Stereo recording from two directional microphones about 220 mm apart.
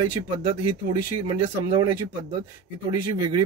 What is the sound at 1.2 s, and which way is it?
Speech, 20° right (ahead or behind).